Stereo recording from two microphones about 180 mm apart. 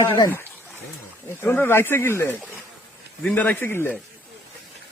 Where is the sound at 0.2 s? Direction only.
15° left (ahead or behind).